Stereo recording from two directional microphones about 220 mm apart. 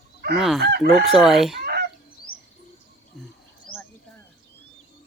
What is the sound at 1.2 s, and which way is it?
Chicken, centre (ahead or behind).